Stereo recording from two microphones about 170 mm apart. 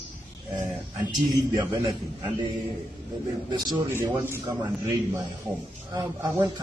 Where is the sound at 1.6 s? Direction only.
20° right (ahead or behind).